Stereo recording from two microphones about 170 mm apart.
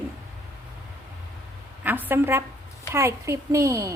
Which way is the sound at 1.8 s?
10° right (ahead or behind).